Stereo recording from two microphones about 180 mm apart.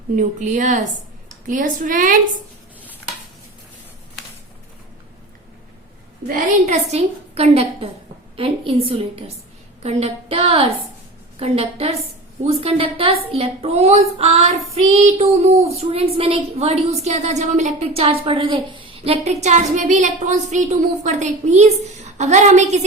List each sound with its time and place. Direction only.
0.2 s a woman's voice: 45° right (ahead or behind)
6.7 s a woman's voice: 40° right (ahead or behind)